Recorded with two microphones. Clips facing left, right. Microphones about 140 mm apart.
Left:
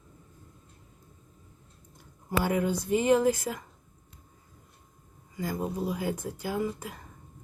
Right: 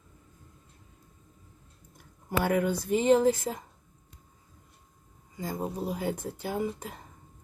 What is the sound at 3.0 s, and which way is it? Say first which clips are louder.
Speech: right 2 dB; 25° right (ahead or behind).